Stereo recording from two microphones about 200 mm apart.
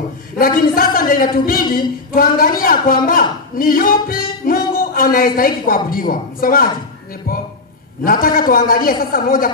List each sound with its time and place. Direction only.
0.4 s music: 45° left (ahead or behind)
8.0 s music: 45° left (ahead or behind)